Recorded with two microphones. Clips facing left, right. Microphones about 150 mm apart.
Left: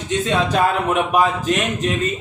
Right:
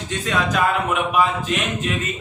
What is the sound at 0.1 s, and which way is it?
Speech, 25° left (ahead or behind).